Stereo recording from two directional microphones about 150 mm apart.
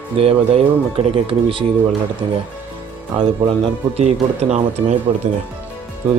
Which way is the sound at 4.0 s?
45° right (ahead or behind).